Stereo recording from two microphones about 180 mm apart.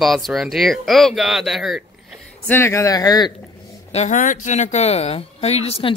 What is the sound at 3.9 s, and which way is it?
Speech, 40° left (ahead or behind).